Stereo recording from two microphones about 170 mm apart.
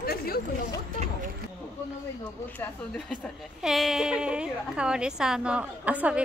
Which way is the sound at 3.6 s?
Centre (ahead or behind).